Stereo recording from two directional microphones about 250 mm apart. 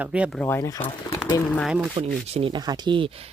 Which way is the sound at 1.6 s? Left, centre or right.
Centre.